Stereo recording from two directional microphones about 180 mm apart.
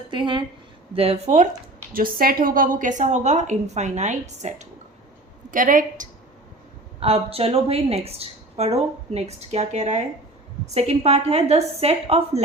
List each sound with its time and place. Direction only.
0.1 s a woman's voice: 25° right (ahead or behind)
1.9 s a woman's voice: 50° right (ahead or behind)
7.0 s a woman's voice: 30° right (ahead or behind)